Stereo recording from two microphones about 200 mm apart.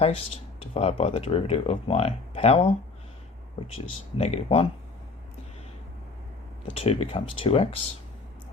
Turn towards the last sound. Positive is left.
turn(degrees=30)  # may be behind; listen again after turning